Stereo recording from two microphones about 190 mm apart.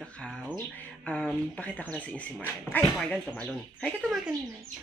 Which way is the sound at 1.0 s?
5° left (ahead or behind).